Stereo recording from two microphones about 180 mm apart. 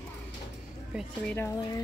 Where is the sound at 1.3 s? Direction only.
15° left (ahead or behind).